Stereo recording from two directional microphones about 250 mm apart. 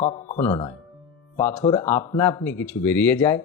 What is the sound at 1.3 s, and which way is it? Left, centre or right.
Speech, centre.